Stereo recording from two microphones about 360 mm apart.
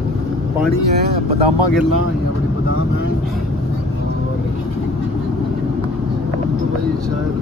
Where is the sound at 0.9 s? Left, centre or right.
Right.